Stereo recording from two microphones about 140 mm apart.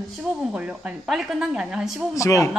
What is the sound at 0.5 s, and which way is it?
Speech, 5° right (ahead or behind).